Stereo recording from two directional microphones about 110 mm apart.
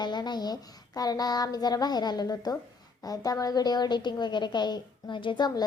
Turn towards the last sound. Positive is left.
turn(degrees=45)  # may be behind; listen again after turning